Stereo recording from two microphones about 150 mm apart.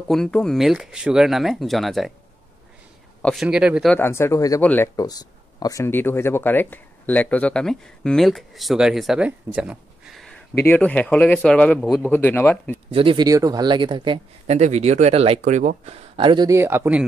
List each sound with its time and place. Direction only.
0.1 s speech: 5° left (ahead or behind)
3.2 s a sound: 5° left (ahead or behind)
3.4 s speech: 5° right (ahead or behind)
3.9 s speech: 15° left (ahead or behind)
12.9 s speech: 35° right (ahead or behind)
14.5 s speech: 45° right (ahead or behind)
15.8 s speech: 40° right (ahead or behind)
16.4 s speech: 15° right (ahead or behind)